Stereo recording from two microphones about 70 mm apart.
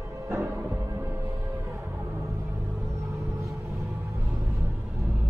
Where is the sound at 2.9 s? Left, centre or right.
Right.